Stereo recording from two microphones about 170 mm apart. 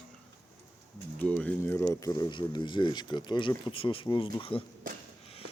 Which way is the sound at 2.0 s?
25° left (ahead or behind).